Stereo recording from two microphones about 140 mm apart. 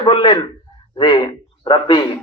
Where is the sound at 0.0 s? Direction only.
35° left (ahead or behind).